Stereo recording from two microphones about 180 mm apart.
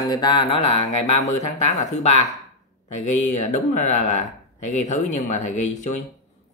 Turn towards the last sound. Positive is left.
turn(degrees=40)  # may be behind; listen again after turning